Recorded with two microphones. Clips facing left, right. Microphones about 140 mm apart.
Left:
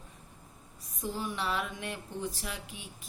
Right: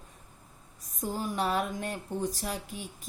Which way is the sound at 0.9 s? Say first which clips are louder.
Right 4 dB; 45° right (ahead or behind).